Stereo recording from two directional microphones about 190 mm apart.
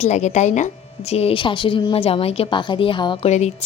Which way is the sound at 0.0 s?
35° left (ahead or behind).